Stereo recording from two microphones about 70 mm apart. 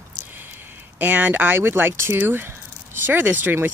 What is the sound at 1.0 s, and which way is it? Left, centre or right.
Speech, right.